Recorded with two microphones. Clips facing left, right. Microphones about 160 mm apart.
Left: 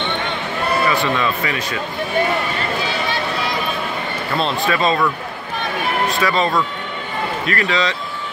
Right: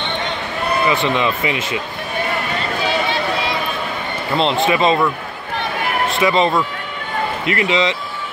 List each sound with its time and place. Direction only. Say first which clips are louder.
0.8 s speech: right 4 dB; 20° right (ahead or behind)
4.4 s speech: right 4 dB; 20° right (ahead or behind)